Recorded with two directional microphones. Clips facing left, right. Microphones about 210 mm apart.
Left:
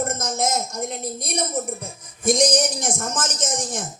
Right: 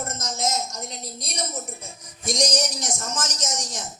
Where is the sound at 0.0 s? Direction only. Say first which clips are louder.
Left 5 dB; 55° left (ahead or behind).